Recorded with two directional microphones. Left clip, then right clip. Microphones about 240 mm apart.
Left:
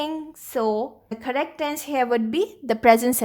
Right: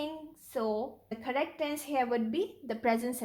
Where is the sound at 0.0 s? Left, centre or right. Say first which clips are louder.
Left 10 dB; left.